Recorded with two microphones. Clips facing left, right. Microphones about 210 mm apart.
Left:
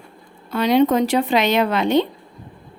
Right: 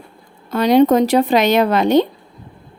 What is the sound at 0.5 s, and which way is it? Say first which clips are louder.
Speech: right 4 dB; 40° right (ahead or behind).